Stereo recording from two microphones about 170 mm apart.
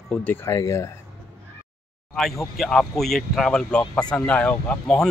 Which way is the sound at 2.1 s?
Centre (ahead or behind).